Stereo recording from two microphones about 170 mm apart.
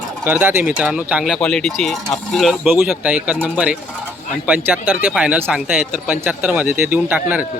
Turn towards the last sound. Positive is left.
turn(degrees=-10)  # may be behind; listen again after turning